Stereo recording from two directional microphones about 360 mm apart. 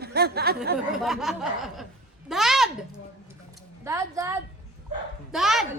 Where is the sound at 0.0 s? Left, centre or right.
Right.